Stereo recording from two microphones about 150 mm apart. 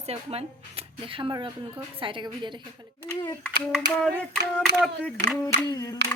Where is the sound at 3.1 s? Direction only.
20° left (ahead or behind).